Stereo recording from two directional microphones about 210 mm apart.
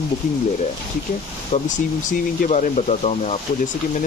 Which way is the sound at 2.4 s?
35° left (ahead or behind).